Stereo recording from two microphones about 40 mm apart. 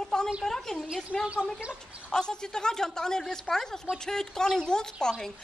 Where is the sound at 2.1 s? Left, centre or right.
Centre.